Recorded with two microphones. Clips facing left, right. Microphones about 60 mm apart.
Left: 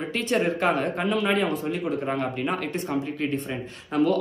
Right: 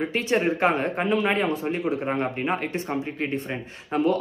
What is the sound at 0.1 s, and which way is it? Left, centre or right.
A man's voice, right.